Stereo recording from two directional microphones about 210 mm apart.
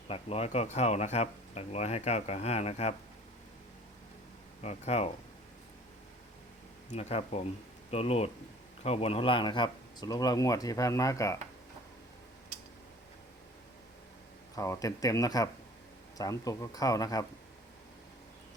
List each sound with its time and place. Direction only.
0.1 s speech: 30° left (ahead or behind)
4.6 s speech: 30° left (ahead or behind)
6.9 s speech: 30° left (ahead or behind); by 11.3 s 15° left (ahead or behind)
14.5 s speech: 15° left (ahead or behind)